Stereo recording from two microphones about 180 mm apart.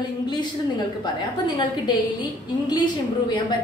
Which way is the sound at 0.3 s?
25° left (ahead or behind).